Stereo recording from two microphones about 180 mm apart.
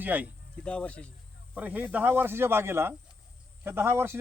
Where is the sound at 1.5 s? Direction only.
10° right (ahead or behind).